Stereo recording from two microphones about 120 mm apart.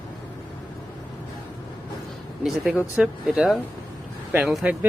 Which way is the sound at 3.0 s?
5° right (ahead or behind).